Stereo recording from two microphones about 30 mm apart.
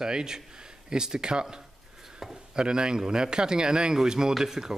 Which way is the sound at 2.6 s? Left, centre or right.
Right.